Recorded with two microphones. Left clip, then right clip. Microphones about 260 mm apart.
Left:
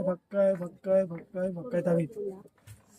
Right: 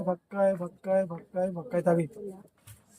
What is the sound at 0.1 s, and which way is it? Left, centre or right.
Speech, centre.